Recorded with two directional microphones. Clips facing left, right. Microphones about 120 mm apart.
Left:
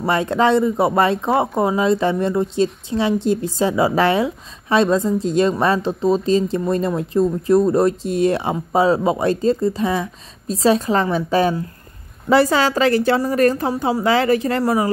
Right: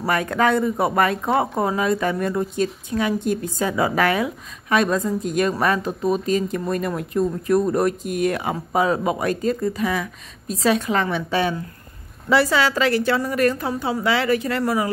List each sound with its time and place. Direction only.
0.0 s a woman's voice: 25° left (ahead or behind)